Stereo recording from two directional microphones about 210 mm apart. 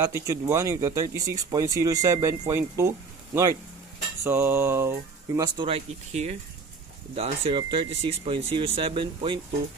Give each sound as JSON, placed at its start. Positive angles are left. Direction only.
{"t": 0.0, "sound": "speech", "side_deg": -15}
{"t": 4.2, "sound": "speech", "side_deg": -10}